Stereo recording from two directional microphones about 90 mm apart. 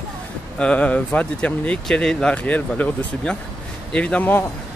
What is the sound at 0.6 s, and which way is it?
Speech, 15° left (ahead or behind).